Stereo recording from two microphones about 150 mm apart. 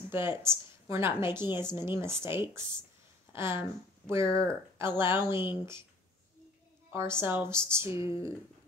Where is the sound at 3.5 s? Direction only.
30° left (ahead or behind).